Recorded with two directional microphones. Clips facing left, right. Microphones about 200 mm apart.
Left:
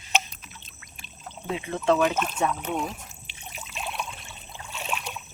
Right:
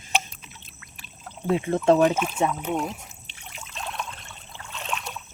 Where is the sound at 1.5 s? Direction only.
45° right (ahead or behind).